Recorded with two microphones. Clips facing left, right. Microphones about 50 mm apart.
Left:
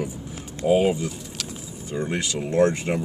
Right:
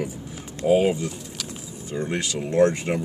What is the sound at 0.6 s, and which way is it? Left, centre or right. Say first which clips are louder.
Speech: right 1 dB; centre.